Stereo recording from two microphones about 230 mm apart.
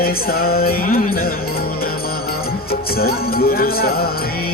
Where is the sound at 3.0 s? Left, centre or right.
Left.